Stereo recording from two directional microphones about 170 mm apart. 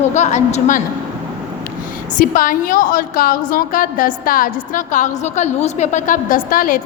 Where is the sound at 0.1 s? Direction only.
45° left (ahead or behind).